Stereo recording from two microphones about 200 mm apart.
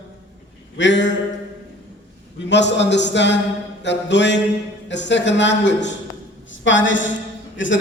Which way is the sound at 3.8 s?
60° left (ahead or behind).